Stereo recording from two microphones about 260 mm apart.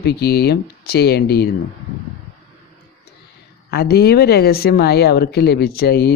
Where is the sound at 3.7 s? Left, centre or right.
Left.